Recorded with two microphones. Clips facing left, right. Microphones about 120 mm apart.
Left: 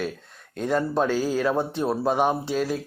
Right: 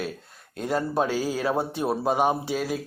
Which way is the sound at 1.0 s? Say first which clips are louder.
Left 2 dB; 45° left (ahead or behind).